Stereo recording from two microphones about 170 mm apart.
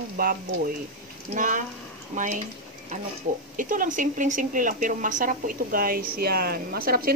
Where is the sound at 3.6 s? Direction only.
50° right (ahead or behind).